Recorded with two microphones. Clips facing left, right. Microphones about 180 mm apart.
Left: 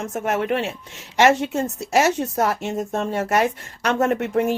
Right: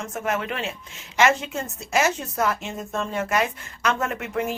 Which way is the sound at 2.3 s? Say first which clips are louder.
Left 4 dB; 40° left (ahead or behind).